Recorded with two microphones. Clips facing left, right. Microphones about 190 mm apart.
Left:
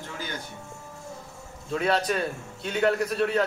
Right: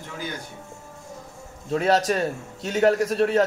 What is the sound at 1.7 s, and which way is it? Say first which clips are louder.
A man's voice: right 4 dB; 40° right (ahead or behind).